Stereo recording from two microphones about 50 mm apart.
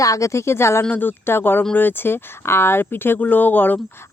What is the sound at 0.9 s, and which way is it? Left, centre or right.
Speech, left.